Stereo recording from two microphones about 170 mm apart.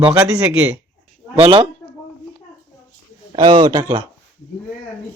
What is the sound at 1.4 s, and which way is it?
Speech, 35° right (ahead or behind).